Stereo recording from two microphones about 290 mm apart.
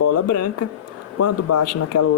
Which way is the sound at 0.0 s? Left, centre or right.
Left.